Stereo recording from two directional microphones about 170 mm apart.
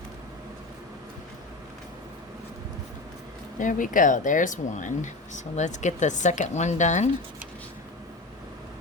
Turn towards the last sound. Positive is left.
turn(degrees=45)  # may be behind; listen again after turning